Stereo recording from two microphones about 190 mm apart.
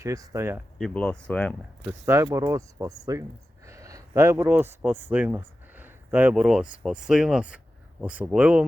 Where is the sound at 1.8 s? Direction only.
15° right (ahead or behind).